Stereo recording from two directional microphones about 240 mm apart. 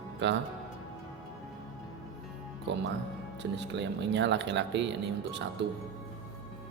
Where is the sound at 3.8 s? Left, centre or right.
Right.